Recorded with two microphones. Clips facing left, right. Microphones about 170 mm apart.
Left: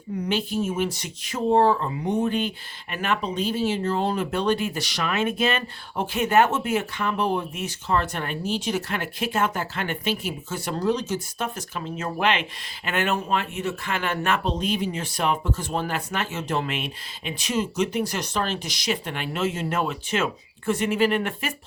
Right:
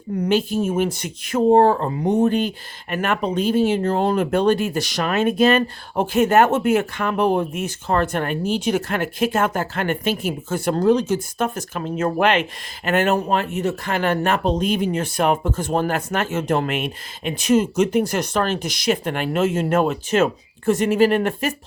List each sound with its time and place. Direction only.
0.3 s speech: 45° right (ahead or behind)